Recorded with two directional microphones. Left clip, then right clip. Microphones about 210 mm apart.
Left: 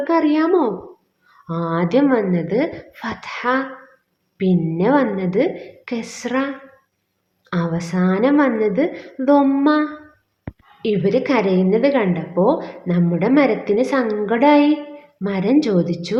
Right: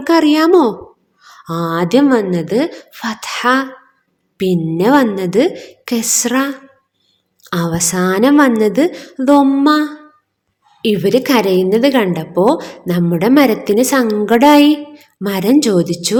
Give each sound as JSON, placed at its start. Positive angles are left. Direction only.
{"t": 0.0, "sound": "a woman's voice", "side_deg": -45}